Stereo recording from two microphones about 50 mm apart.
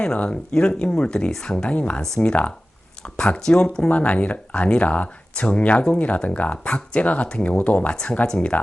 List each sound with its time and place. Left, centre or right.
0.0 s speech: centre
1.7 s speech: left
2.0 s speech: centre
3.0 s speech: left
3.8 s speech: left